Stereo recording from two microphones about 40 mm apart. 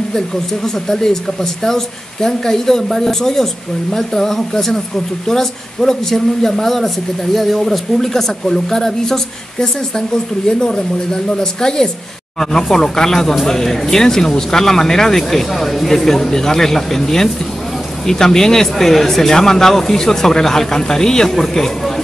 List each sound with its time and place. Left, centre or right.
0.8 s a man's voice: centre
11.6 s a man's voice: centre